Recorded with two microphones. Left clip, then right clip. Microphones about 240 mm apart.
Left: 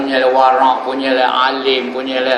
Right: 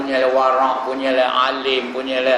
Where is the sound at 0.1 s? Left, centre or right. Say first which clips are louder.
Left 4 dB; centre.